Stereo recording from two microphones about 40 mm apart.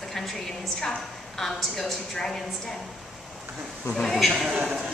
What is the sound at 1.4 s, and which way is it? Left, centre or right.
Speech, centre.